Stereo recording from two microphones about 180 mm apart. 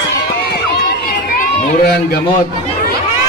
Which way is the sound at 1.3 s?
55° left (ahead or behind).